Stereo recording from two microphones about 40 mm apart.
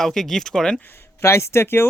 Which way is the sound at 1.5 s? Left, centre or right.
Left.